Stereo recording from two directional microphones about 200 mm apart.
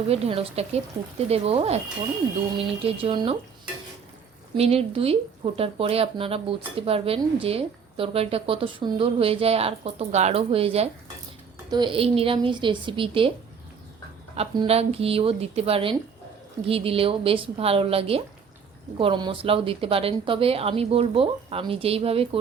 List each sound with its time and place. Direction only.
0.1 s a woman's voice: 30° right (ahead or behind)
4.5 s a woman's voice: 30° right (ahead or behind)
14.3 s a woman's voice: 25° right (ahead or behind)